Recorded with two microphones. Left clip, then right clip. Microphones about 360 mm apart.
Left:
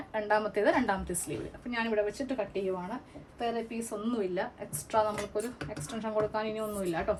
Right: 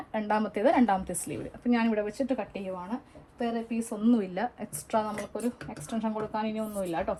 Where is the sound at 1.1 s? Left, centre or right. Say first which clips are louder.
Right 1 dB; centre.